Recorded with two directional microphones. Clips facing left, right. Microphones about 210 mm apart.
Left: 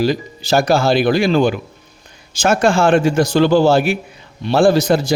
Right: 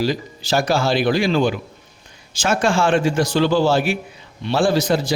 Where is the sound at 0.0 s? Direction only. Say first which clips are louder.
Left 4 dB; 50° left (ahead or behind).